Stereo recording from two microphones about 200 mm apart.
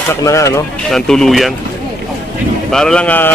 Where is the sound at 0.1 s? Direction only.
15° left (ahead or behind).